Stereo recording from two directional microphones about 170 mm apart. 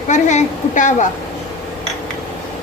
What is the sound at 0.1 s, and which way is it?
Speech, 45° left (ahead or behind).